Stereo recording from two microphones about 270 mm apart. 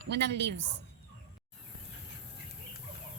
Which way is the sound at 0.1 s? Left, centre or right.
Right.